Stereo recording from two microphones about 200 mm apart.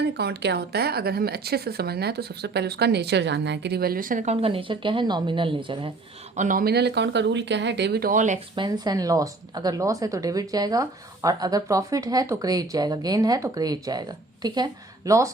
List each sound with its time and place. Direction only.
0.2 s speech: 55° right (ahead or behind); by 5.9 s 25° right (ahead or behind)
6.3 s speech: 40° right (ahead or behind)
8.5 s a woman's voice: 20° right (ahead or behind)